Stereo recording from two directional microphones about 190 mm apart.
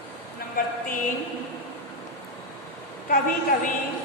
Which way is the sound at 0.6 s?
45° left (ahead or behind).